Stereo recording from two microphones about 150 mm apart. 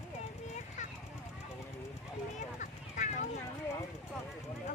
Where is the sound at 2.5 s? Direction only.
55° left (ahead or behind).